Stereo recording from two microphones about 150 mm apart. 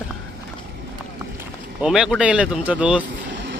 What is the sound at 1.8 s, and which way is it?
Speech, 5° right (ahead or behind).